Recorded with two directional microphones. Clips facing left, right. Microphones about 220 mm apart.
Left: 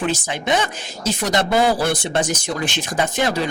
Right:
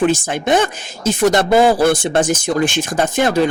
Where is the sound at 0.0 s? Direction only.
50° right (ahead or behind).